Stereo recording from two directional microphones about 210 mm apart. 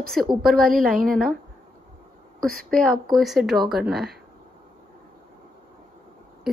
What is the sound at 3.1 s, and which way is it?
Speech, centre (ahead or behind).